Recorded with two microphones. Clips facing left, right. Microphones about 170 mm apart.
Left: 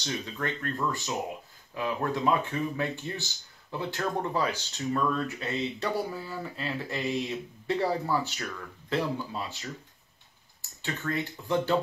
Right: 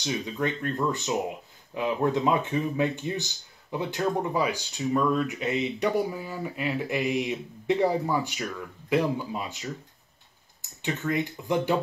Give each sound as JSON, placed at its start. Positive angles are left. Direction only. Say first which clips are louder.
{"t": 0.0, "sound": "speech", "louder": "right 5 dB", "side_deg": -15}